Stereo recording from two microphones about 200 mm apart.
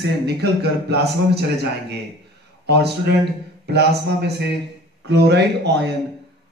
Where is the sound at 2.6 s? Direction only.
55° right (ahead or behind).